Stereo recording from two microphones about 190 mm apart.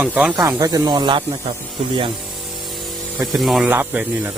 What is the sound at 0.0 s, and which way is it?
Speech, 5° right (ahead or behind).